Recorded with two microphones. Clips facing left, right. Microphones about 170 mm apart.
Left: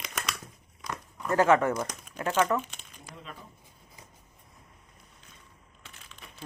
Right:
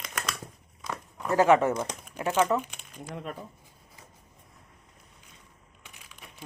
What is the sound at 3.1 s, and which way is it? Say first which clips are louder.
Speech: right 9 dB; 55° right (ahead or behind).